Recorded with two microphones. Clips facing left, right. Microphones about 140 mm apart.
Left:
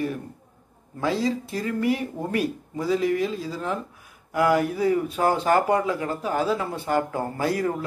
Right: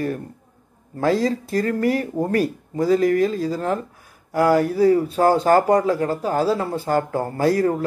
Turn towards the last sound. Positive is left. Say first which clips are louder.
# right 6 dB
turn(degrees=-40)  # may be behind; listen again after turning